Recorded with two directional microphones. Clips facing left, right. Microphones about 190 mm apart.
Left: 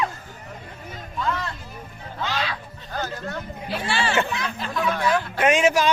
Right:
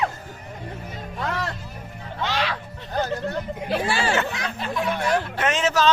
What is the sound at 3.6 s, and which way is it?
Speech, 45° right (ahead or behind).